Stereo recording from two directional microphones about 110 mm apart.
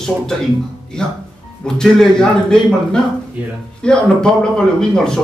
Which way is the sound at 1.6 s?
5° left (ahead or behind).